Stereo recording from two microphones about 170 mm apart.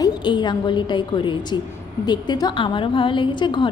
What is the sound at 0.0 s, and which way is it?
A woman's voice, 25° left (ahead or behind).